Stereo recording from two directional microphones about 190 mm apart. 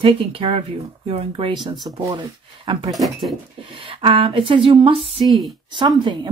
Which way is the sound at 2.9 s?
Centre (ahead or behind).